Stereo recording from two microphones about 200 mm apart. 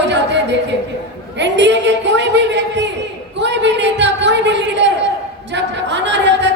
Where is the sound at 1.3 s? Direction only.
60° right (ahead or behind).